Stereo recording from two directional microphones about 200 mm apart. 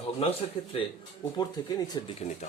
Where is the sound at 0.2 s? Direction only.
30° left (ahead or behind).